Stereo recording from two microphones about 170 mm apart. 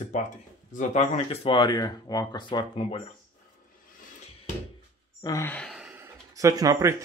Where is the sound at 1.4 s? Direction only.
25° left (ahead or behind).